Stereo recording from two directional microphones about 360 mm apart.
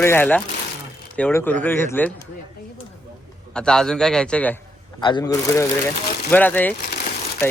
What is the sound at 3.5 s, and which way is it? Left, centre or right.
A man's voice, centre.